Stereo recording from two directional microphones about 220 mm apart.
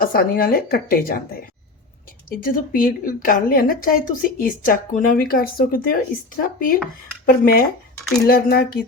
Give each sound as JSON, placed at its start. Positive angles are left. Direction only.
{"t": 0.0, "sound": "speech", "side_deg": 40}